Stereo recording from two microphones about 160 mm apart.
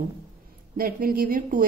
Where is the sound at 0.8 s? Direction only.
65° right (ahead or behind).